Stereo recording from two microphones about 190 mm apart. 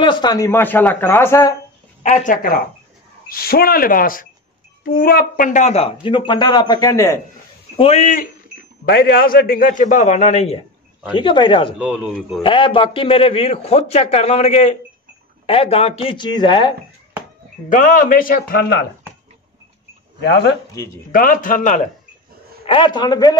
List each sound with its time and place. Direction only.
0.0 s speech: 25° left (ahead or behind)
2.0 s a man's voice: 45° left (ahead or behind); by 7.2 s 15° left (ahead or behind)
7.7 s a man's voice: 30° left (ahead or behind)
8.8 s a man's voice: 55° left (ahead or behind); by 11.7 s 25° left (ahead or behind)
11.8 s speech: 5° right (ahead or behind)
12.4 s a man's voice: 25° left (ahead or behind)
17.6 s a man's voice: 45° left (ahead or behind)
20.2 s speech: 65° left (ahead or behind)
20.7 s speech: 15° left (ahead or behind)
21.1 s a man's voice: 45° left (ahead or behind)
22.7 s speech: 25° left (ahead or behind)